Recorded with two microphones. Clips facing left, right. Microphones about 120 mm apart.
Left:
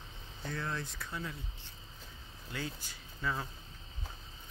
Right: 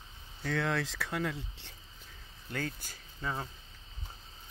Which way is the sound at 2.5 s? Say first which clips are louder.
Right 3 dB; 50° right (ahead or behind).